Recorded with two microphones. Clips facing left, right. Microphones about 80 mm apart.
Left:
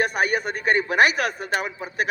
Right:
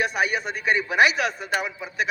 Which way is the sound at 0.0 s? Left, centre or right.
Left.